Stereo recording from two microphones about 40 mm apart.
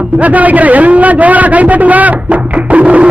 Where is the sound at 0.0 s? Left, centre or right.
Right.